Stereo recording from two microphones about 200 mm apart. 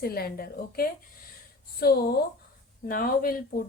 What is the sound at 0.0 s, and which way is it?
A woman's voice, 50° left (ahead or behind).